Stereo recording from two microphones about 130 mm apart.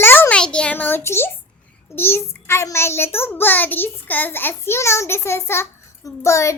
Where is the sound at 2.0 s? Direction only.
20° left (ahead or behind).